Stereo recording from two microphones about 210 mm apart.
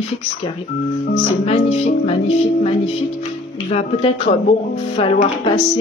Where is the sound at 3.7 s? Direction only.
30° left (ahead or behind).